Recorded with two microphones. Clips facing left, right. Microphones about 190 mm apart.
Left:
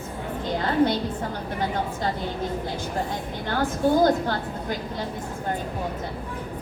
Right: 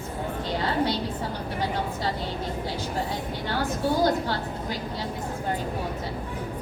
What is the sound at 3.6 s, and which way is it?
A woman's voice, 50° left (ahead or behind).